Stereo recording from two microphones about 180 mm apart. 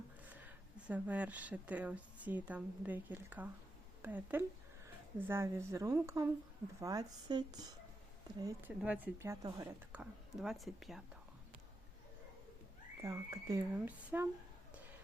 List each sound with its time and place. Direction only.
0.3 s speech: 10° right (ahead or behind)
8.8 s speech: 10° right (ahead or behind)
10.0 s speech: 5° right (ahead or behind)
13.0 s speech: 15° right (ahead or behind)